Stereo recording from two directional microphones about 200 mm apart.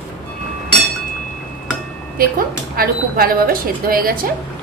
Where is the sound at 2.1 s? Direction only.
45° right (ahead or behind).